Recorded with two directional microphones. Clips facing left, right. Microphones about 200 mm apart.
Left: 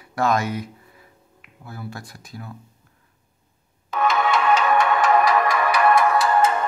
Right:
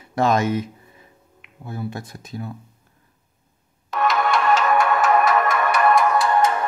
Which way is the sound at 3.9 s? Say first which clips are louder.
Even; centre (ahead or behind).